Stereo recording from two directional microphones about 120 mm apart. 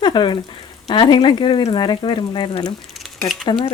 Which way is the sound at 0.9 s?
40° left (ahead or behind).